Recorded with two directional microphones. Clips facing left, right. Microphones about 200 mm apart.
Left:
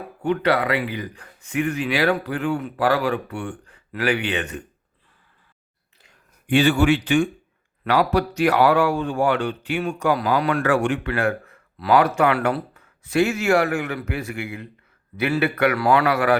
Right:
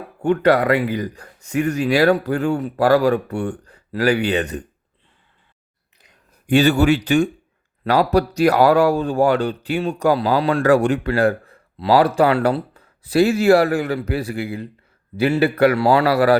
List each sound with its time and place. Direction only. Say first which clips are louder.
0.2 s speech: right 5 dB; 45° right (ahead or behind)
6.5 s speech: right 3 dB; 40° right (ahead or behind)